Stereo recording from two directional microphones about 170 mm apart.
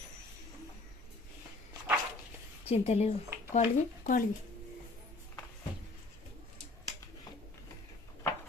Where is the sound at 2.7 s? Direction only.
40° left (ahead or behind).